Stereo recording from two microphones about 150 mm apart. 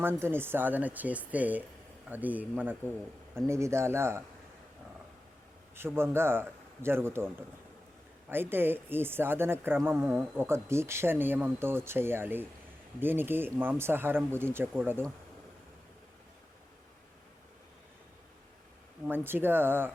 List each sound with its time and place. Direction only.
0.0 s speech: 15° right (ahead or behind)
5.7 s speech: 15° right (ahead or behind)
8.3 s speech: 15° right (ahead or behind)
19.0 s speech: 15° right (ahead or behind)